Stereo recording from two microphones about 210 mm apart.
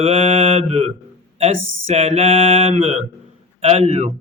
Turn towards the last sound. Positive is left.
turn(degrees=-30)  # may be behind; listen again after turning